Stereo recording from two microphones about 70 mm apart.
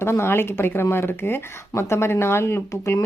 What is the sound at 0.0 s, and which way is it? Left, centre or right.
Speech, left.